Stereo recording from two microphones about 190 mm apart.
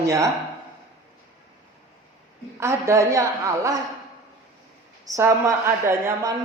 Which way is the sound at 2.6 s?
15° right (ahead or behind).